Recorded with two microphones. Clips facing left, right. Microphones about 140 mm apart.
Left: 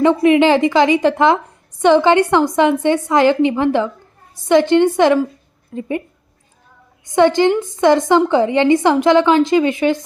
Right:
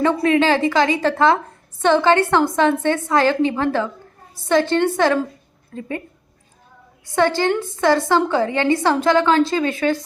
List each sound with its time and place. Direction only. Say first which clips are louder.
0.0 s a woman's voice: left 5 dB; 20° left (ahead or behind)
7.0 s a woman's voice: left 6 dB; 20° left (ahead or behind)